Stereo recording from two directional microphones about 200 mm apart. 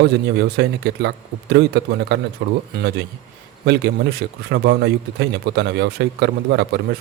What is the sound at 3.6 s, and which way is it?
Speech, 55° right (ahead or behind).